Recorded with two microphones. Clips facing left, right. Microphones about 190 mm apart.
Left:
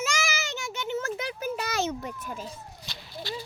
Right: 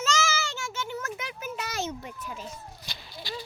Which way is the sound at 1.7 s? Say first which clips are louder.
Left 3 dB; 75° left (ahead or behind).